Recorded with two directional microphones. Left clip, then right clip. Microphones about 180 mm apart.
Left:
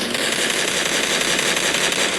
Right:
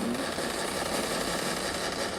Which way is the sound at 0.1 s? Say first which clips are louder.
Left 11 dB; 25° left (ahead or behind).